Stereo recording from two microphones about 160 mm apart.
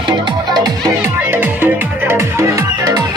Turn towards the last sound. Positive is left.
turn(degrees=-25)  # may be behind; listen again after turning